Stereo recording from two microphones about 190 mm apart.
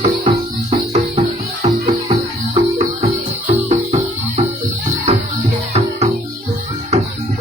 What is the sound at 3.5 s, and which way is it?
Music, 35° right (ahead or behind).